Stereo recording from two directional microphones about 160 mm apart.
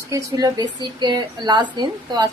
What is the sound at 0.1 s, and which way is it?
A woman's voice, 25° right (ahead or behind).